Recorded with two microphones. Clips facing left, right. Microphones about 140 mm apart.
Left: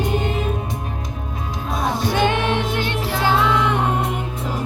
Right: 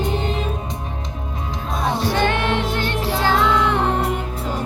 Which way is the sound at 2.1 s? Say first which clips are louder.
Left 2 dB; 15° left (ahead or behind).